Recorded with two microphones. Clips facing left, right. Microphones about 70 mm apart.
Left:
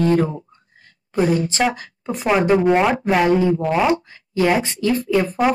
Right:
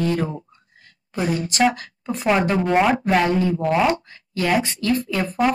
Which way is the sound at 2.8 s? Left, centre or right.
Centre.